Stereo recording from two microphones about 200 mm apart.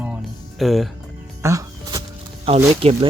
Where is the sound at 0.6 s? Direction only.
Centre (ahead or behind).